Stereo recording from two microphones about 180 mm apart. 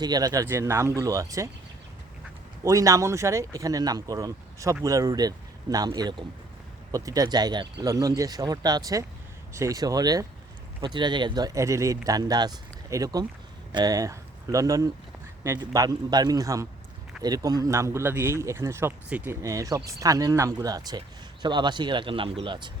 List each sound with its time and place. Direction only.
0.0 s speech: 20° right (ahead or behind)
2.6 s speech: 20° right (ahead or behind)